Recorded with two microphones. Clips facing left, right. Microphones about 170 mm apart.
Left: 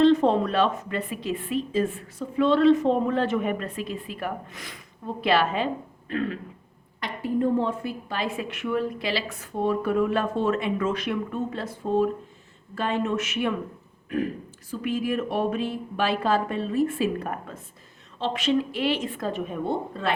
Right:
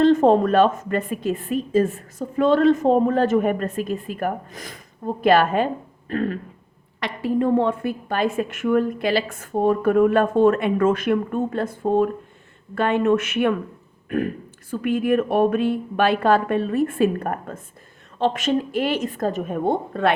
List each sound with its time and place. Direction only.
0.0 s a woman's voice: 45° right (ahead or behind)
7.0 s a woman's voice: 80° right; by 13.6 s 55° right (ahead or behind)
14.7 s a woman's voice: 55° right (ahead or behind)